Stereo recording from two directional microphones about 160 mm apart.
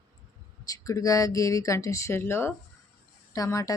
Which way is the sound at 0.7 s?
20° left (ahead or behind).